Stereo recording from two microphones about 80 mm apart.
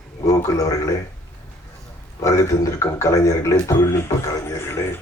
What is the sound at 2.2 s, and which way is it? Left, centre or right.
A man's voice, left.